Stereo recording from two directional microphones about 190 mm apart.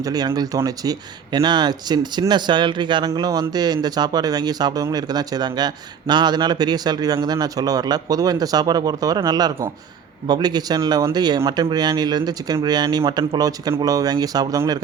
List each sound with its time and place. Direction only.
0.0 s speech: 20° right (ahead or behind)